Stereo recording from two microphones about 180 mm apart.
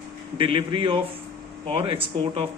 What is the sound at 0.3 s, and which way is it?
Speech, 30° right (ahead or behind).